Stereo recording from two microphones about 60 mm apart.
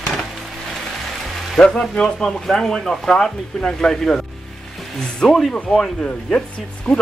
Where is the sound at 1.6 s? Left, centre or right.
Centre.